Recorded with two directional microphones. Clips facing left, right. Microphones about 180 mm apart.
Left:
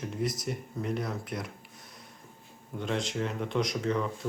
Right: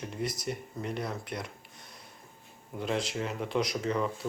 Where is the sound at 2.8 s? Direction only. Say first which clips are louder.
Even; 5° right (ahead or behind).